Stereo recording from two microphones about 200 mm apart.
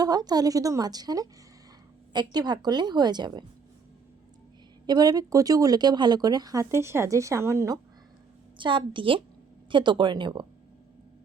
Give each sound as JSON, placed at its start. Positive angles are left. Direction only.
{"t": 0.0, "sound": "a woman's voice", "side_deg": -20}
{"t": 4.9, "sound": "a woman's voice", "side_deg": -20}